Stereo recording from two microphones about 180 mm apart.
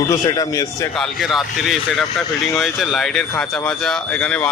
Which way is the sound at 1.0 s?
Centre (ahead or behind).